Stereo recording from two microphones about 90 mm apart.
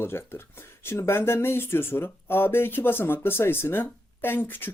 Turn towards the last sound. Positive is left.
turn(degrees=25)  # may be behind; listen again after turning